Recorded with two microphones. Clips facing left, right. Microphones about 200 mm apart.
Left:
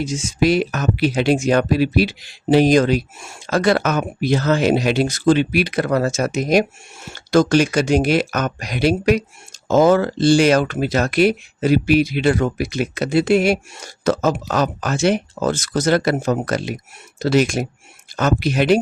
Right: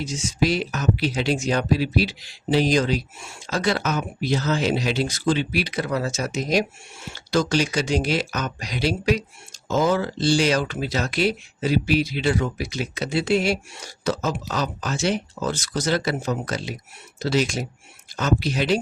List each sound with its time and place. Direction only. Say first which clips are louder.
0.0 s speech: left 5 dB; 50° left (ahead or behind)